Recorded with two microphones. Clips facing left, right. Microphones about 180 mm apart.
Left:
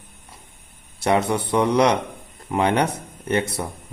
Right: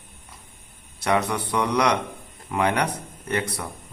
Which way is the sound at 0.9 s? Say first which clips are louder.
Left 3 dB; 25° left (ahead or behind).